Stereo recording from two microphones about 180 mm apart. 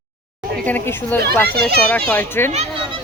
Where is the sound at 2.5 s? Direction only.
35° right (ahead or behind).